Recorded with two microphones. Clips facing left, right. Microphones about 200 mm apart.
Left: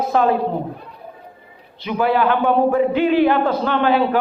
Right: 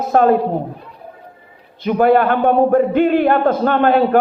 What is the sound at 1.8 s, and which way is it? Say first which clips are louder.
A man's voice: right 5 dB; 50° right (ahead or behind).